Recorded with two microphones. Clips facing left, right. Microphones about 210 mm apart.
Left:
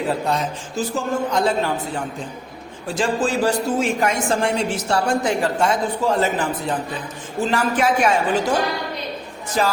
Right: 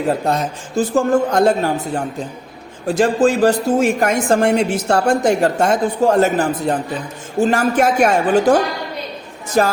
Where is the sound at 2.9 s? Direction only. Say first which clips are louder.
Right 6 dB; 60° right (ahead or behind).